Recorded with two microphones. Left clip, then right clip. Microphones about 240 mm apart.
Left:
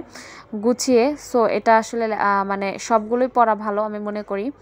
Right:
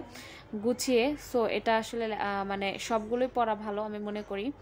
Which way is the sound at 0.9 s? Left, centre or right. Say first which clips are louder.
Left 10 dB; centre.